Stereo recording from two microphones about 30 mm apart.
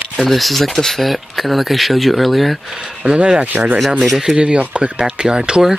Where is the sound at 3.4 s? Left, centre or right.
Right.